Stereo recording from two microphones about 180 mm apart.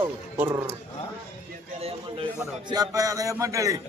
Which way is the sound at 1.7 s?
35° right (ahead or behind).